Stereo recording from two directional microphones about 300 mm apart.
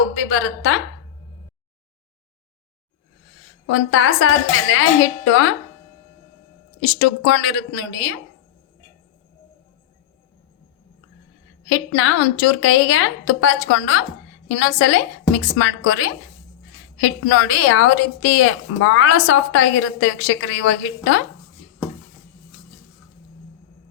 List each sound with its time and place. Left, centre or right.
0.3 s speech: left
3.7 s a woman's voice: left
7.0 s speech: left
11.7 s a woman's voice: left